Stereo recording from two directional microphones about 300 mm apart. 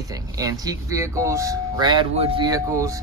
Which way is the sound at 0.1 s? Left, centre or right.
Centre.